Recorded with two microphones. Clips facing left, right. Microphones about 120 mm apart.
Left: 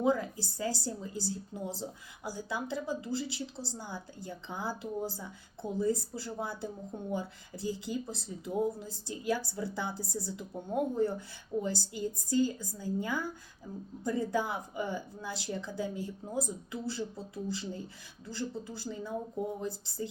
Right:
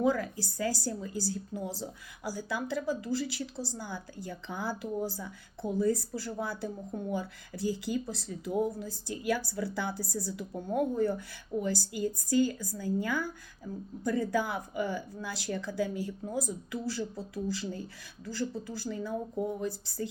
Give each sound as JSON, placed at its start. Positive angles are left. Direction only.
{"t": 0.0, "sound": "a woman's voice", "side_deg": 25}